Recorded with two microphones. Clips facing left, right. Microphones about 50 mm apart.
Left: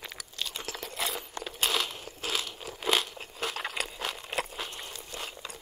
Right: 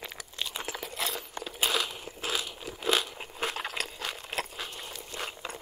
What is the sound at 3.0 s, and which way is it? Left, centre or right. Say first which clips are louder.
Crunch: right 1 dB; centre.